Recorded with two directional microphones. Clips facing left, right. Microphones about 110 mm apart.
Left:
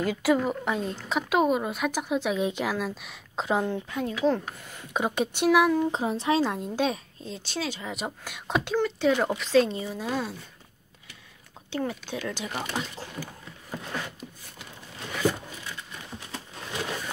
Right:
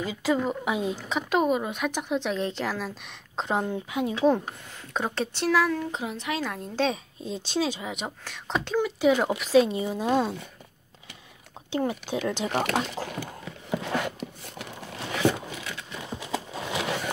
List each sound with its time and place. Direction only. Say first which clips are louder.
0.2 s a woman's voice: right 1 dB; 5° left (ahead or behind)
4.9 s speech: left 2 dB; 10° left (ahead or behind)
5.9 s a woman's voice: left 6 dB; 35° left (ahead or behind)
6.6 s speech: even; 15° left (ahead or behind)
7.2 s speech: right 5 dB; 20° right (ahead or behind)
7.9 s speech: left 1 dB; 5° left (ahead or behind)
8.7 s speech: right 2 dB; 5° right (ahead or behind)
9.8 s speech: right 6 dB; 20° right (ahead or behind)
11.9 s speech: right 4 dB; 20° right (ahead or behind)
12.4 s a sound: right 6 dB; 65° right (ahead or behind); by 14.1 s 90° right
15.1 s a sound: right 2 dB; 75° right (ahead or behind)